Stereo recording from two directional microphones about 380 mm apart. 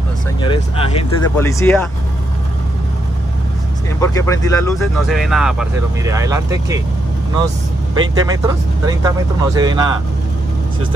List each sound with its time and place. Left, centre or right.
0.4 s speech: centre
4.0 s speech: centre
8.0 s speech: centre